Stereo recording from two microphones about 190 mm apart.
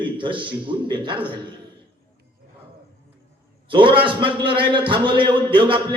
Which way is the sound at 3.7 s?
25° right (ahead or behind).